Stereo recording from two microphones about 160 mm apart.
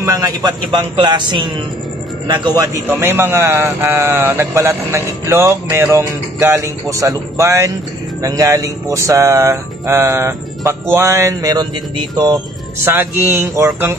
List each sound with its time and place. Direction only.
0.0 s speech: 20° right (ahead or behind)
2.9 s a man's voice: 15° right (ahead or behind)
12.8 s a man's voice: 15° right (ahead or behind)